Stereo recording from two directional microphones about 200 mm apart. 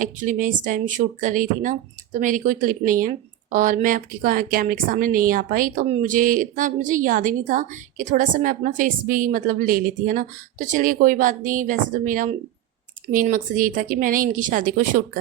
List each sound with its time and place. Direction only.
0.0 s a woman's voice: 40° right (ahead or behind)